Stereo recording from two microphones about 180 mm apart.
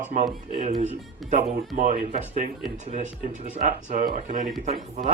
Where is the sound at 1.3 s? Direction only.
45° right (ahead or behind).